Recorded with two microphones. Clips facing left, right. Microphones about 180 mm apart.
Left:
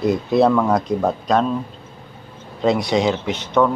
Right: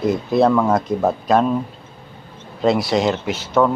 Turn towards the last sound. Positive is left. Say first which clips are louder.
# even
turn(degrees=-5)  # may be behind; listen again after turning